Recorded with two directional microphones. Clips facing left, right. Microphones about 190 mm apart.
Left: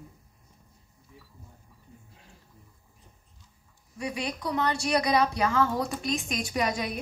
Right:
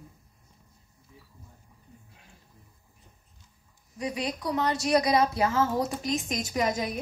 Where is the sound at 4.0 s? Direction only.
20° right (ahead or behind).